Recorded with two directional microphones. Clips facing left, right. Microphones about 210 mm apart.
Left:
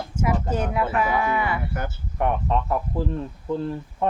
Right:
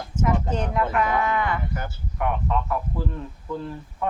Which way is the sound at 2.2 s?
30° left (ahead or behind).